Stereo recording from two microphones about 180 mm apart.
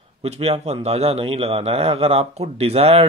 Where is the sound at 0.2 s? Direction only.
35° right (ahead or behind).